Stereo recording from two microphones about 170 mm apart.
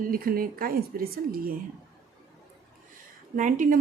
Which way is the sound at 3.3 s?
50° right (ahead or behind).